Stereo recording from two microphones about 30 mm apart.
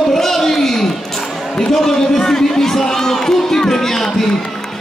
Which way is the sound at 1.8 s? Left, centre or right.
Centre.